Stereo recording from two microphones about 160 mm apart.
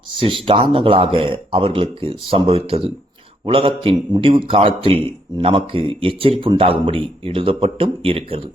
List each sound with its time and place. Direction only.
0.2 s a man's voice: 30° right (ahead or behind)